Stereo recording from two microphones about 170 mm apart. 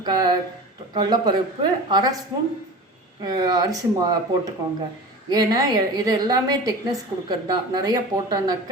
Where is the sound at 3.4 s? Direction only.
25° right (ahead or behind).